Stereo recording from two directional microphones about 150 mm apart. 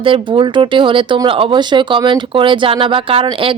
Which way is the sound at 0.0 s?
35° right (ahead or behind).